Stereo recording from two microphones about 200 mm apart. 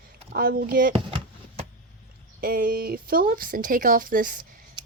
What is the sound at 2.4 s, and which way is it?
Speech, 45° right (ahead or behind).